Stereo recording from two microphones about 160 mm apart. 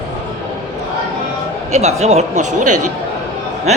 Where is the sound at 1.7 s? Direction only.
45° right (ahead or behind).